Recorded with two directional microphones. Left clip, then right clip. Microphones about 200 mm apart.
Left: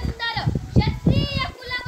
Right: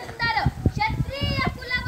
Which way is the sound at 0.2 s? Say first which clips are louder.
Right 3 dB; 5° left (ahead or behind).